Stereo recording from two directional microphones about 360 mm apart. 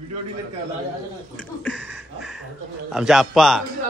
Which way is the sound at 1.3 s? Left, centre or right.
Centre.